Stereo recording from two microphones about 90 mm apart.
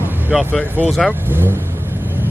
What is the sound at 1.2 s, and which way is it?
Vehicle, 25° right (ahead or behind).